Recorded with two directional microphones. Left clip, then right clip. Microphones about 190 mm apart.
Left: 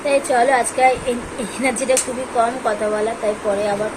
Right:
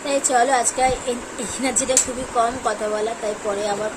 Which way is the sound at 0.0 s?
15° right (ahead or behind).